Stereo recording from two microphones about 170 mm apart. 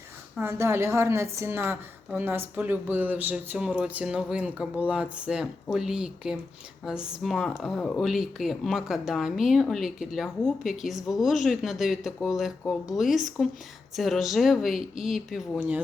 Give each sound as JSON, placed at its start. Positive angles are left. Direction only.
{"t": 0.3, "sound": "speech", "side_deg": -15}